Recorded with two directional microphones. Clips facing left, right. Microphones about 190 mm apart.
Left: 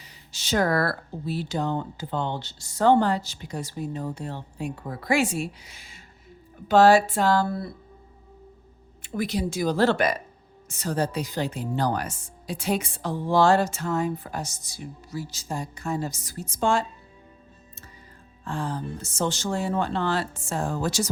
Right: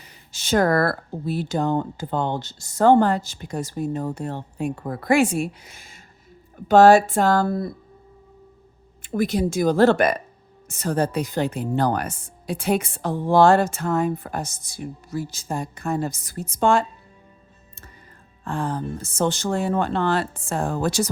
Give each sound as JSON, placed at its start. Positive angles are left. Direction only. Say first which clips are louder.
{"t": 0.0, "sound": "speech", "louder": "right 2 dB", "side_deg": -50}
{"t": 9.0, "sound": "speech", "louder": "right 5 dB", "side_deg": -50}
{"t": 18.4, "sound": "speech", "louder": "right 4 dB", "side_deg": -55}